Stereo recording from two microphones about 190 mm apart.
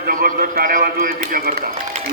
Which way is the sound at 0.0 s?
50° right (ahead or behind).